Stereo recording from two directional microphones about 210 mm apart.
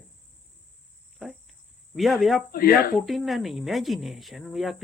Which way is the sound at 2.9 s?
Centre (ahead or behind).